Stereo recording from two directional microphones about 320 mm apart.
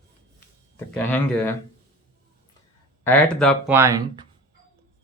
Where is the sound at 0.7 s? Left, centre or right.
Centre.